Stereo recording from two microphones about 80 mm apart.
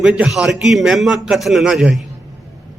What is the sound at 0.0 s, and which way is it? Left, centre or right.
A man's voice, centre.